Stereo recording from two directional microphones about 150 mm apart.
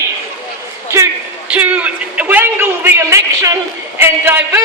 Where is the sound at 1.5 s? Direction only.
10° right (ahead or behind).